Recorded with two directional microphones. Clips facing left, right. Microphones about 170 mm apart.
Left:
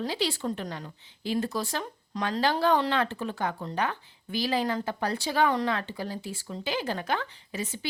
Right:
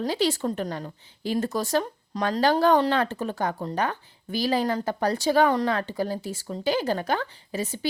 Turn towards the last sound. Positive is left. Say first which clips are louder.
# right 5 dB
turn(degrees=-40)  # may be behind; listen again after turning